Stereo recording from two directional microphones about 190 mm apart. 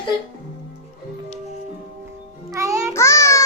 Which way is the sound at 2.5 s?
15° right (ahead or behind).